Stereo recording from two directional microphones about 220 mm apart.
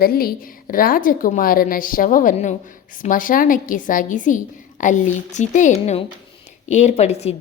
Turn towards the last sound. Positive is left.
turn(degrees=30)  # may be behind; listen again after turning